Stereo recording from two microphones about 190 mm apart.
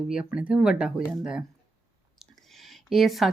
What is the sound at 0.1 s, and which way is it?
Speech, 5° right (ahead or behind).